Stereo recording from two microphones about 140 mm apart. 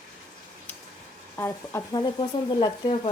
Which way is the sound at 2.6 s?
35° left (ahead or behind).